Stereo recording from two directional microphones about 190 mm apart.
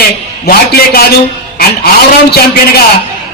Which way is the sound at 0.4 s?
55° left (ahead or behind).